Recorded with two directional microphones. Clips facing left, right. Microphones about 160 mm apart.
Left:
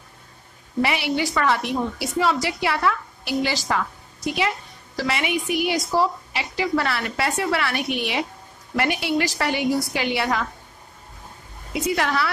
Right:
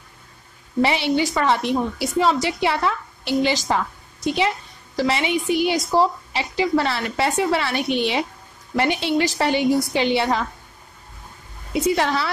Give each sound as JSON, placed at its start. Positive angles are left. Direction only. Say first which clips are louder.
{"t": 0.8, "sound": "a woman's voice", "louder": "right 4 dB", "side_deg": -25}
{"t": 11.7, "sound": "a woman's voice", "louder": "right 3 dB", "side_deg": -25}